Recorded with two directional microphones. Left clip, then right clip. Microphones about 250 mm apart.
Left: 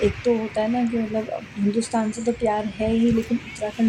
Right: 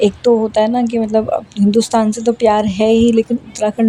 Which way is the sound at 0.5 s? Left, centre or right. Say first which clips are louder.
Right 9 dB; right.